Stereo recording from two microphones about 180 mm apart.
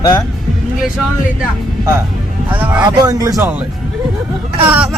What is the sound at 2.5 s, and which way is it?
Speech, 10° right (ahead or behind).